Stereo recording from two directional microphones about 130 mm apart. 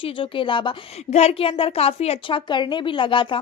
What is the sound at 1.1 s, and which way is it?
A woman's voice, 50° left (ahead or behind).